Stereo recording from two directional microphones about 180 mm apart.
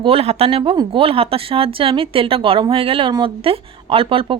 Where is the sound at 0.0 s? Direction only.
35° right (ahead or behind).